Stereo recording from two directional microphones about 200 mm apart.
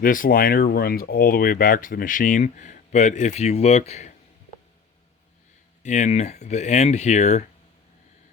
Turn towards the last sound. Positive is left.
turn(degrees=35)  # may be behind; listen again after turning